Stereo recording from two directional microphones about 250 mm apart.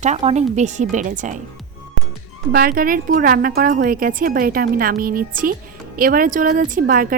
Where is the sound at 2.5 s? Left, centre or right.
Right.